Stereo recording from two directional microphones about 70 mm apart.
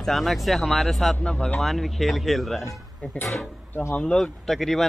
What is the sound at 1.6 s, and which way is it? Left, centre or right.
Speech, centre.